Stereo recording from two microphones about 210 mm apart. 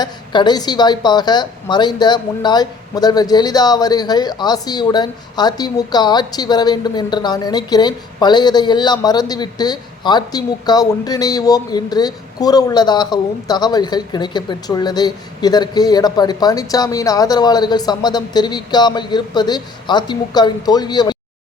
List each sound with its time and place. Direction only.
0.0 s a woman's voice: 20° left (ahead or behind)